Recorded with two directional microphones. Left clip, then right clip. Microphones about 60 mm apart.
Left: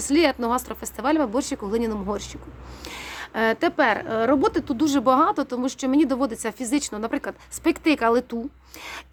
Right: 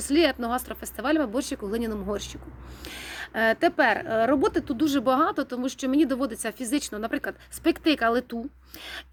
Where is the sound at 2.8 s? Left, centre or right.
Left.